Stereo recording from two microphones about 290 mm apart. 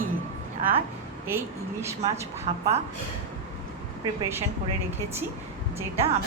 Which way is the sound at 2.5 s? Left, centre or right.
Right.